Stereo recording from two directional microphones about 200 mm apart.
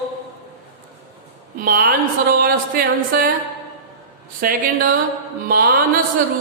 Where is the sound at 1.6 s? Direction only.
45° right (ahead or behind).